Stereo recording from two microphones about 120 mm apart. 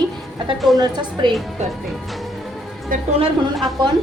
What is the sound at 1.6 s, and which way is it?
Speech, 70° right (ahead or behind).